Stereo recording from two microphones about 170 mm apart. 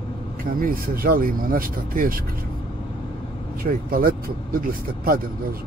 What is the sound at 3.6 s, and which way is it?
Speech, 60° right (ahead or behind).